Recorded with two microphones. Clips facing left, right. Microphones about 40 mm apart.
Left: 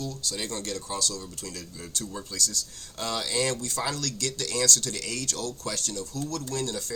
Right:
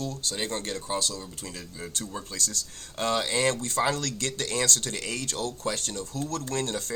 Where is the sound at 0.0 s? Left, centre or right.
Right.